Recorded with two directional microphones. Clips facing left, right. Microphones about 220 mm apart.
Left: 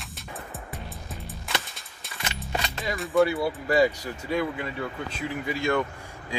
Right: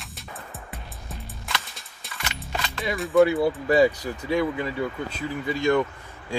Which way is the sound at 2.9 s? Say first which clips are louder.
Right 4 dB; centre (ahead or behind).